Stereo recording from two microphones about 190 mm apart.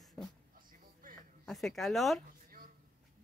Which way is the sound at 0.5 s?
45° right (ahead or behind).